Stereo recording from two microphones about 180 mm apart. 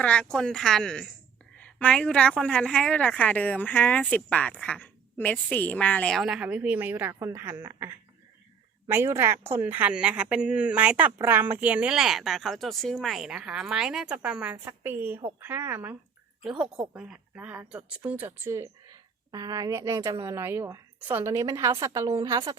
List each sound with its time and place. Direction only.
0.0 s a woman's voice: 5° left (ahead or behind); by 22.5 s 20° right (ahead or behind)